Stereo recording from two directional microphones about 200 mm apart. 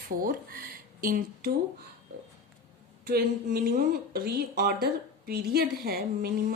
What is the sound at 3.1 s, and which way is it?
A woman's voice, 50° right (ahead or behind).